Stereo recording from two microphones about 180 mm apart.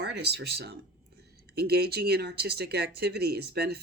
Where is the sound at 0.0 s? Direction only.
65° right (ahead or behind).